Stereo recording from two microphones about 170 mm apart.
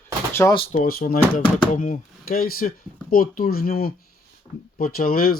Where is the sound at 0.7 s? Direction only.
60° left (ahead or behind).